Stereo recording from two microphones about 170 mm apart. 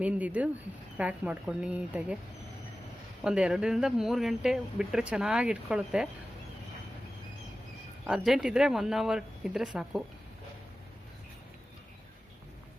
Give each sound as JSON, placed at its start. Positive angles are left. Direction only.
{"t": 0.0, "sound": "a woman's voice", "side_deg": -10}
{"t": 3.2, "sound": "speech", "side_deg": -5}
{"t": 8.0, "sound": "speech", "side_deg": -5}